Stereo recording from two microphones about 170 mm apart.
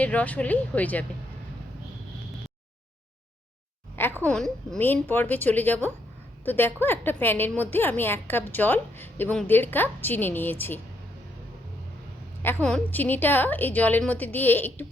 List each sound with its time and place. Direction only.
0.0 s a woman's voice: 10° left (ahead or behind)
4.2 s a woman's voice: 5° left (ahead or behind)
12.6 s a woman's voice: 10° left (ahead or behind)